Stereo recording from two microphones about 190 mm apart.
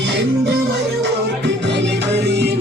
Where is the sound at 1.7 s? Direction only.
65° right (ahead or behind).